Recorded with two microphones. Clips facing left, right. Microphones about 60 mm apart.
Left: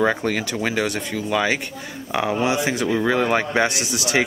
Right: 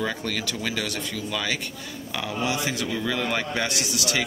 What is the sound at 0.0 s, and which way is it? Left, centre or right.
A man's voice, left.